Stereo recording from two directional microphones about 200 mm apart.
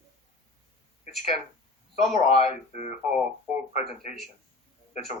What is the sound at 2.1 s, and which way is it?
Speech, 35° left (ahead or behind).